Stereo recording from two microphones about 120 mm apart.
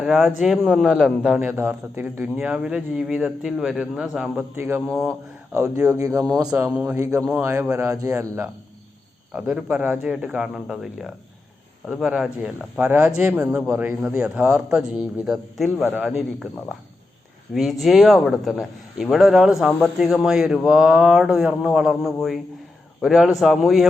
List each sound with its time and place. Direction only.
0.0 s a man's voice: centre (ahead or behind)
1.4 s a man's voice: 20° right (ahead or behind)
6.7 s a man's voice: 10° right (ahead or behind)
9.3 s a man's voice: 10° right (ahead or behind)